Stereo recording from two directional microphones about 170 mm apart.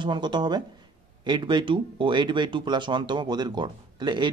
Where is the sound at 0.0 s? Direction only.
25° right (ahead or behind).